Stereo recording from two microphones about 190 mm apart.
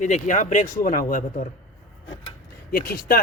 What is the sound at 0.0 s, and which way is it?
A man's voice, 40° left (ahead or behind).